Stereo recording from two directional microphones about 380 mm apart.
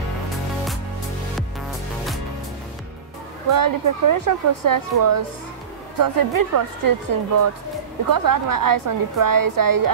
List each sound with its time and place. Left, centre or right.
3.5 s a woman's voice: right